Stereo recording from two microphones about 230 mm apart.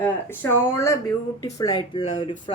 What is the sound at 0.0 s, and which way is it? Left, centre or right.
Speech, centre.